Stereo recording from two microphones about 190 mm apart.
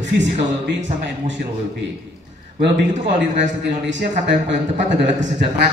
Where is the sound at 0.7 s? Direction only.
40° right (ahead or behind).